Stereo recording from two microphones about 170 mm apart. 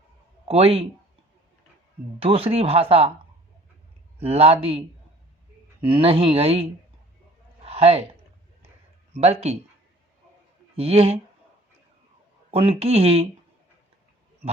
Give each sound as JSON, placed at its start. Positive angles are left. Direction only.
{"t": 0.4, "sound": "speech", "side_deg": -35}
{"t": 2.1, "sound": "speech", "side_deg": -35}
{"t": 4.2, "sound": "speech", "side_deg": -35}
{"t": 5.9, "sound": "speech", "side_deg": -35}
{"t": 7.6, "sound": "a sound", "side_deg": -35}
{"t": 9.1, "sound": "speech", "side_deg": -35}
{"t": 10.8, "sound": "speech", "side_deg": -35}
{"t": 12.5, "sound": "speech", "side_deg": -35}